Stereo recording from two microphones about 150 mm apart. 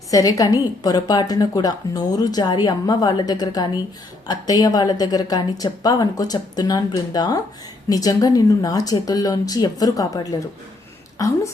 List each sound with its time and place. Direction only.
0.1 s a woman's voice: 25° left (ahead or behind)